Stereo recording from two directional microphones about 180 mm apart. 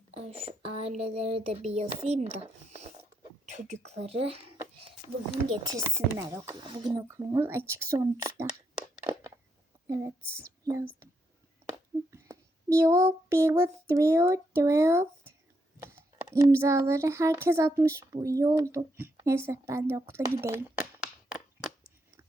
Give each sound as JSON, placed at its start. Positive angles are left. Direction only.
{"t": 0.3, "sound": "speech", "side_deg": -30}
{"t": 5.5, "sound": "speech", "side_deg": -20}
{"t": 9.8, "sound": "a sound", "side_deg": -15}
{"t": 10.2, "sound": "speech", "side_deg": 5}
{"t": 11.7, "sound": "speech", "side_deg": -15}